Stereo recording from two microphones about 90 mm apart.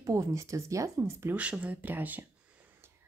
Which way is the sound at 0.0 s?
35° right (ahead or behind).